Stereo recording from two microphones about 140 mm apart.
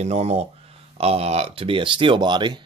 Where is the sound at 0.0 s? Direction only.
50° right (ahead or behind).